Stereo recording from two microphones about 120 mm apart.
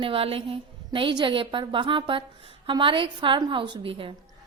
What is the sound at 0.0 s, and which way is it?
A woman's voice, 50° right (ahead or behind).